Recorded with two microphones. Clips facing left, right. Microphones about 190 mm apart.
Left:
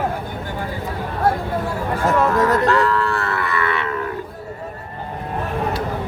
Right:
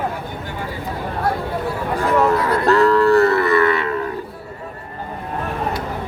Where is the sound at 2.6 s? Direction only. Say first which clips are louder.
Right 4 dB; 40° right (ahead or behind).